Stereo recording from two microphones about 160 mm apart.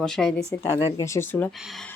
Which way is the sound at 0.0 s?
5° left (ahead or behind).